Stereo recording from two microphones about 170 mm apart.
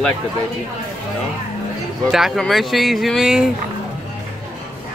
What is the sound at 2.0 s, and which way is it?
Speech, centre (ahead or behind).